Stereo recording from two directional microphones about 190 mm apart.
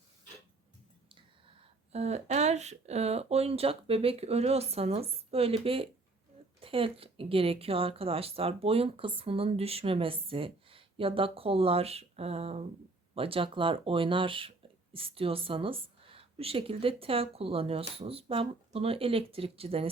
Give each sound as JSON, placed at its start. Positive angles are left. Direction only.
{"t": 1.1, "sound": "speech", "side_deg": -30}